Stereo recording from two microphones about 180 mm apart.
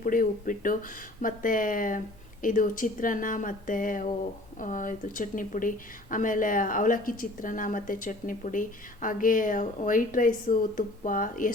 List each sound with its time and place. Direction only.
0.0 s speech: 50° left (ahead or behind)